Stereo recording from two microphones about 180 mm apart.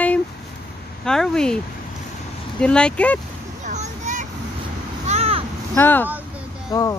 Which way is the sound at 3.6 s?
40° right (ahead or behind).